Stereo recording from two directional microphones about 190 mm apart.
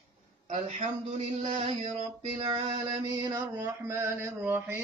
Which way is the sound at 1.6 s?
35° right (ahead or behind).